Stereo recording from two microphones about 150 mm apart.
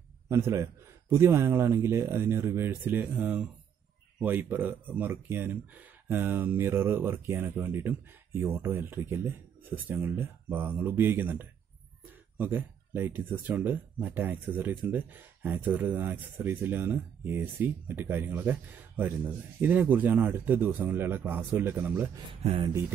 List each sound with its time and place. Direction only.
0.3 s speech: 20° right (ahead or behind)
22.3 s speech: 40° right (ahead or behind)